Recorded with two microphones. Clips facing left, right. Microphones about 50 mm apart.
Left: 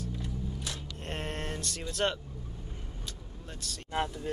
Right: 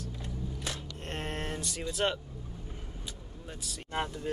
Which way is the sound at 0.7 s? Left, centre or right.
Centre.